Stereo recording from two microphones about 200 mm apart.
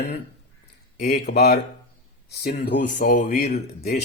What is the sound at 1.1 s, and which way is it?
A man's voice, 55° left (ahead or behind).